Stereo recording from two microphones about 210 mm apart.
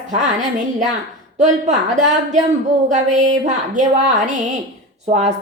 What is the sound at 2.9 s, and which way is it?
Speech, 35° right (ahead or behind).